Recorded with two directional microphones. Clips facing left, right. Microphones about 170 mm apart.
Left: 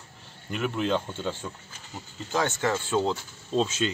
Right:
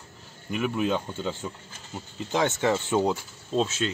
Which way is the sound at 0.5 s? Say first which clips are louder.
Right 1 dB; 10° right (ahead or behind).